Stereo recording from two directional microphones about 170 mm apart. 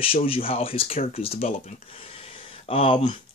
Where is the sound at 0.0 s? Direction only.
35° left (ahead or behind).